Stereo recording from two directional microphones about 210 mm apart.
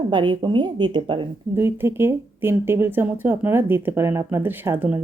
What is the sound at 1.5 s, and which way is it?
Speech, 10° right (ahead or behind).